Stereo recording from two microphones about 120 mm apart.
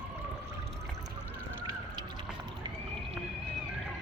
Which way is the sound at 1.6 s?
40° right (ahead or behind).